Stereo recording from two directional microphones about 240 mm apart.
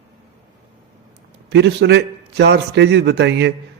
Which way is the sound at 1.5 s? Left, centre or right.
Right.